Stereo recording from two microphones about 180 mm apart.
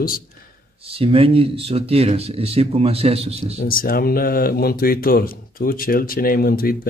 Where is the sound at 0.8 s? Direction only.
30° right (ahead or behind).